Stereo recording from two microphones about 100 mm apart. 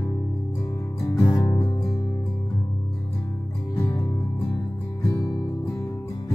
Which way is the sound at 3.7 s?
20° left (ahead or behind).